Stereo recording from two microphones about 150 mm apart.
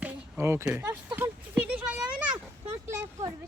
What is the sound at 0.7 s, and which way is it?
Speech, 15° right (ahead or behind).